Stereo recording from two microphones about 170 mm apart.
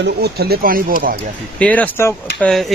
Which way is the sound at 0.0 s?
70° right (ahead or behind).